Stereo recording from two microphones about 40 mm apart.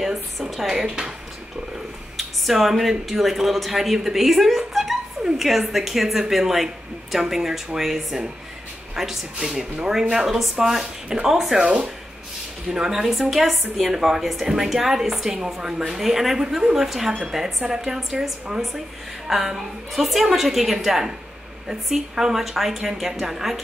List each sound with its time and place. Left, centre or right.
0.0 s a woman's voice: centre
0.7 s speech: centre
2.1 s speech: centre
11.1 s speech: centre
11.3 s speech: centre
11.6 s speech: right
12.7 s speech: centre
19.2 s speech: centre